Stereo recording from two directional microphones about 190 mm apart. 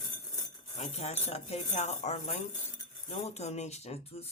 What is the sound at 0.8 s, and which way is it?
Speech, 35° left (ahead or behind).